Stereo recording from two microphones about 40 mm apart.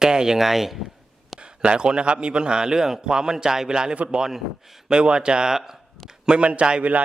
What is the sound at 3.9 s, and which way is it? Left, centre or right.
Speech, right.